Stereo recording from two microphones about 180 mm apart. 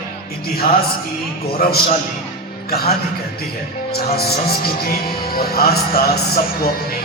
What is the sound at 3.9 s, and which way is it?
Speech, 60° left (ahead or behind).